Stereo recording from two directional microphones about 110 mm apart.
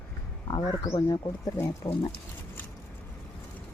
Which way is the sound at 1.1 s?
25° left (ahead or behind).